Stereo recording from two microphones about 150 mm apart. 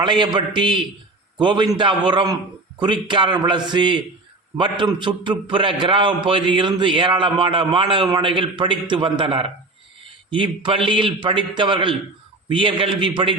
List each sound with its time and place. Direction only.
0.0 s a man's voice: 30° right (ahead or behind)